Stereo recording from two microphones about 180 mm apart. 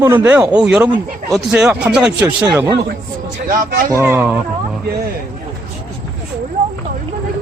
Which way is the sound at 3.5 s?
55° right (ahead or behind).